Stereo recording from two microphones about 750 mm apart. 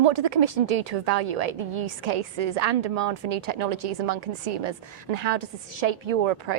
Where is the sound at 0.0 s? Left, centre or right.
Right.